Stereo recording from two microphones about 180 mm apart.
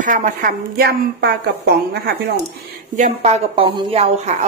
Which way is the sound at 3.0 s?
35° right (ahead or behind).